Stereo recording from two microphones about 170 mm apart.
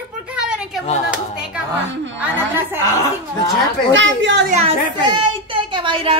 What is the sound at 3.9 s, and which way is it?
Speech, 90° right.